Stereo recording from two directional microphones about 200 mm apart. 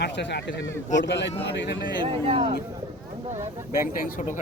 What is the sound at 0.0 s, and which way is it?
Speech, 60° left (ahead or behind).